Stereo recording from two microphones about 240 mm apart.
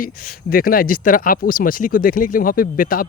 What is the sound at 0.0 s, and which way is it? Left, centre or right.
Speech, left.